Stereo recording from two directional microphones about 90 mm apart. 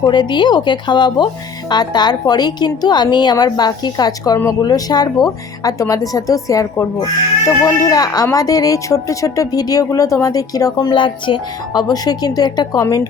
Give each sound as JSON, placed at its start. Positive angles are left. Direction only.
{"t": 0.0, "sound": "speech", "side_deg": 55}